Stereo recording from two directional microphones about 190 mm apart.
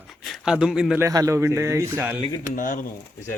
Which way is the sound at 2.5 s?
45° left (ahead or behind).